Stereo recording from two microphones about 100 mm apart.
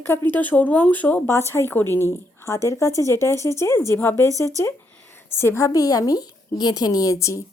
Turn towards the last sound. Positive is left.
turn(degrees=30)  # may be behind; listen again after turning